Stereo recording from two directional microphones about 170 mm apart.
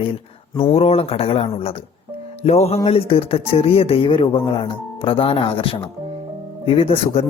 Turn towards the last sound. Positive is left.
turn(degrees=35)  # may be behind; listen again after turning